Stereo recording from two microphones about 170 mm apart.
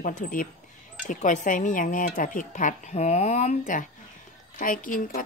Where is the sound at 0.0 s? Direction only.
50° left (ahead or behind).